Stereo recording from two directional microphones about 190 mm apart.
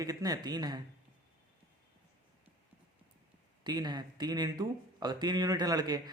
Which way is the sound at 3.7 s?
20° right (ahead or behind).